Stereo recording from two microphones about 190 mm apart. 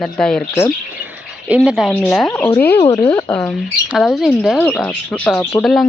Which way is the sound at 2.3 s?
15° left (ahead or behind).